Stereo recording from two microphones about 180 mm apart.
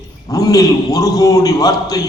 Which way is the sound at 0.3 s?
20° left (ahead or behind).